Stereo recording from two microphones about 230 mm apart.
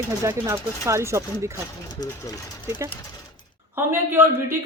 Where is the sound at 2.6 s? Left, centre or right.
Centre.